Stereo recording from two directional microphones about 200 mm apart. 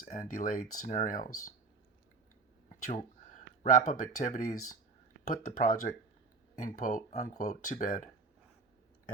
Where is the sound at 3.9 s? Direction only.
40° left (ahead or behind).